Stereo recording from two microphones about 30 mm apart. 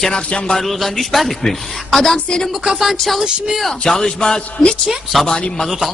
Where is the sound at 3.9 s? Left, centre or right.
Centre.